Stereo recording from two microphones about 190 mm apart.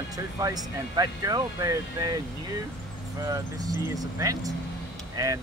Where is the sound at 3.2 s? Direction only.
20° right (ahead or behind).